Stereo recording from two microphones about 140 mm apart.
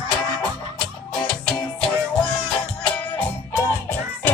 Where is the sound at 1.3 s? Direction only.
5° left (ahead or behind).